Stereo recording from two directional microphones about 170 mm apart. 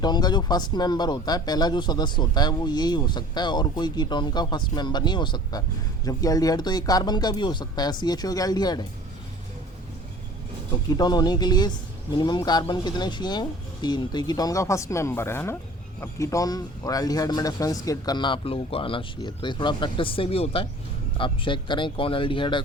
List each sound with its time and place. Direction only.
0.0 s speech: 25° left (ahead or behind)
10.8 s speech: 25° left (ahead or behind)